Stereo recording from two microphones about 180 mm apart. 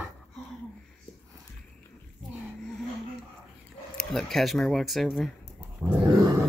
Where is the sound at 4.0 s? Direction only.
Centre (ahead or behind).